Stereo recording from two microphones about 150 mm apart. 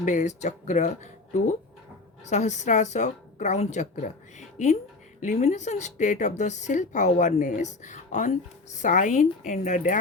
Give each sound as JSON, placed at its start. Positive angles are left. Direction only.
{"t": 0.0, "sound": "a woman's voice", "side_deg": 55}